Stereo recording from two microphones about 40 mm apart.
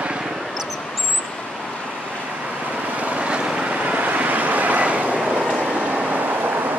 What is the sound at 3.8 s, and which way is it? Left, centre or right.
Vehicle, right.